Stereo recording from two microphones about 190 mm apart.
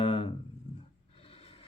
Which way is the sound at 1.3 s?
30° left (ahead or behind).